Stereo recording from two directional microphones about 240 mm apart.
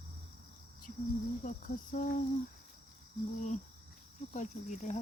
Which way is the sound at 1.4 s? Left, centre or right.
Left.